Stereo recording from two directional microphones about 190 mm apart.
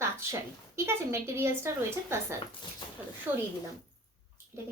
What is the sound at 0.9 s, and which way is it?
Speech, 15° right (ahead or behind).